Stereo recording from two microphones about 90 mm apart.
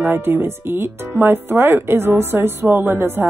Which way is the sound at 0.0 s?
25° right (ahead or behind).